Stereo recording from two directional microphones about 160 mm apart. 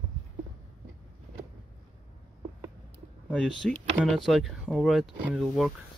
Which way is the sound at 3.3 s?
5° left (ahead or behind).